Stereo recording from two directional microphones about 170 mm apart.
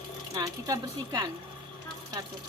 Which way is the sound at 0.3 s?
20° right (ahead or behind).